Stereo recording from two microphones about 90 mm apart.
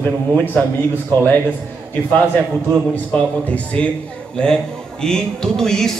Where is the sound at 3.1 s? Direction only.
15° left (ahead or behind).